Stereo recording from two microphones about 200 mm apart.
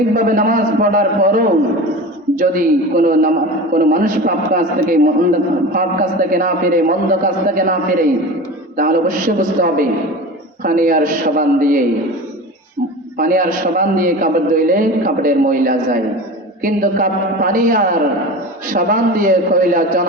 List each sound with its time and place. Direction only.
0.1 s a man's voice: 40° right (ahead or behind)
13.1 s a man's voice: 45° right (ahead or behind)